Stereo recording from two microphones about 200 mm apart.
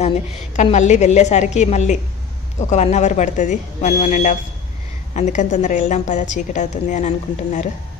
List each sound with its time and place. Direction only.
0.6 s a woman's voice: 35° left (ahead or behind)